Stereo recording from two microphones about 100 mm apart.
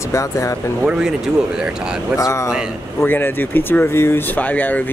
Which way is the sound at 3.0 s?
20° left (ahead or behind).